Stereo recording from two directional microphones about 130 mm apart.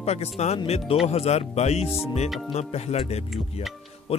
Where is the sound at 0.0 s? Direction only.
55° left (ahead or behind).